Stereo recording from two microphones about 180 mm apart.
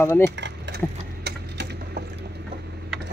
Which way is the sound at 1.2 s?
65° right (ahead or behind).